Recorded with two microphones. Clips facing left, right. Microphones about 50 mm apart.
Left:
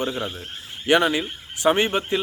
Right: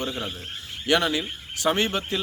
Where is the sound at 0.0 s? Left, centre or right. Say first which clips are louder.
Left 4 dB; centre.